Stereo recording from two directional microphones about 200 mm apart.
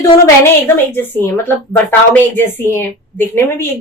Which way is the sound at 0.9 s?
10° left (ahead or behind).